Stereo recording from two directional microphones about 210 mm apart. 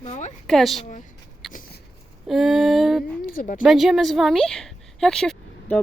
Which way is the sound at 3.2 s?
40° left (ahead or behind).